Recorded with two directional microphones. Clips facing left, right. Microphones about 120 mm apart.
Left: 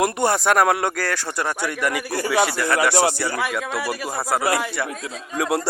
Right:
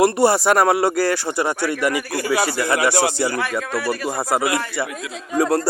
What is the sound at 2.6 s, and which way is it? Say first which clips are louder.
Speech: right 1 dB; 15° right (ahead or behind).